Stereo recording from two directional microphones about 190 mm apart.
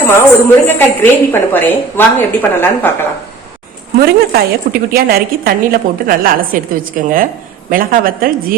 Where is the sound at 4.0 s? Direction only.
55° right (ahead or behind).